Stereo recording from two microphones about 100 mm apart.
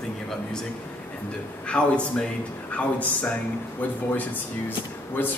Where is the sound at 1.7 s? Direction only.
10° left (ahead or behind).